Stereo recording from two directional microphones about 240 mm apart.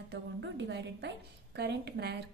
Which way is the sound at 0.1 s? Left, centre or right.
Right.